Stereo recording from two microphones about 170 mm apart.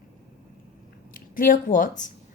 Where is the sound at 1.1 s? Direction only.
55° left (ahead or behind).